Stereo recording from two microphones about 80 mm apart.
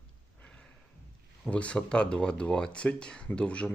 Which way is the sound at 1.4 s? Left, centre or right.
Centre.